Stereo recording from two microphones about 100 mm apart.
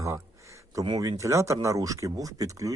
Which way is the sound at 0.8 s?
45° right (ahead or behind).